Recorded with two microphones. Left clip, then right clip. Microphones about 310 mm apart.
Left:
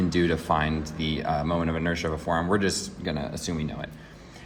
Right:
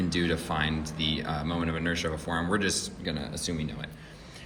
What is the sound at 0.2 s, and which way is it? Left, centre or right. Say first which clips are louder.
Speech: left 6 dB; left.